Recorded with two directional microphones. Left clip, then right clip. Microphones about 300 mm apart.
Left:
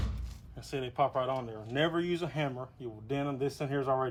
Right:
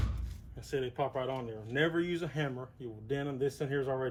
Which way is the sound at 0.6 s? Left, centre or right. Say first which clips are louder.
Left 3 dB; left.